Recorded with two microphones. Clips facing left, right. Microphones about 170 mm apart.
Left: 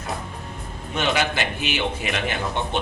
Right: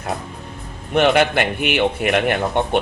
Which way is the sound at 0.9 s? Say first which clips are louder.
Right 8 dB; 60° right (ahead or behind).